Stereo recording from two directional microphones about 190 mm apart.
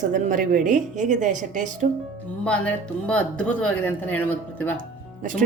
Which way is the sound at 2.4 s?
5° left (ahead or behind).